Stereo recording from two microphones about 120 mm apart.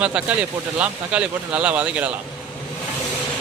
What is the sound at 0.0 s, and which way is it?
Speech, 10° right (ahead or behind).